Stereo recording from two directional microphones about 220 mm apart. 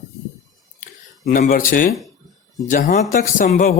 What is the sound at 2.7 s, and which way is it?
Speech, 40° left (ahead or behind).